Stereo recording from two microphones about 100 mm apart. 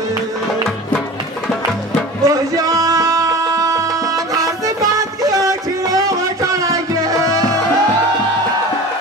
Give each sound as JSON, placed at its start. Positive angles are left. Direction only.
{"t": 2.2, "sound": "music", "side_deg": -35}